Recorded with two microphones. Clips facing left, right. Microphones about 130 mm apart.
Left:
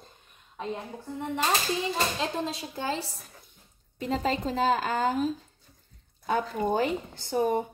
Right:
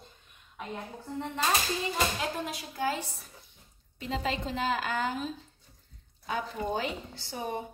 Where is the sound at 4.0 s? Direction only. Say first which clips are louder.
Left 4 dB; 45° left (ahead or behind).